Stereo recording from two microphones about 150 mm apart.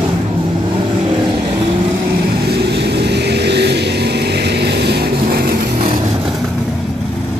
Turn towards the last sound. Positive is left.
turn(degrees=-80)